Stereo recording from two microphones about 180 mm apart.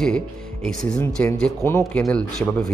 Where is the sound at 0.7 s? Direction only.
5° left (ahead or behind).